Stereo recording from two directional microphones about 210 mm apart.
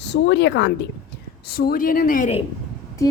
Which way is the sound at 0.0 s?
55° left (ahead or behind).